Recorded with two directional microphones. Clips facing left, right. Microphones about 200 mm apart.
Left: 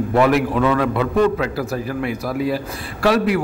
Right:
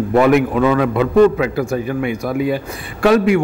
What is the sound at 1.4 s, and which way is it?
A man's voice, centre (ahead or behind).